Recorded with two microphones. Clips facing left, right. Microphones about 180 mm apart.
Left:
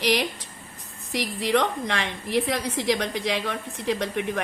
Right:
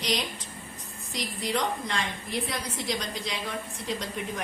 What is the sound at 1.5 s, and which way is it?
A woman's voice, 70° left (ahead or behind).